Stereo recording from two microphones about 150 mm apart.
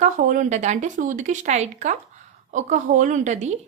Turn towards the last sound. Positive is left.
turn(degrees=-50)  # may be behind; listen again after turning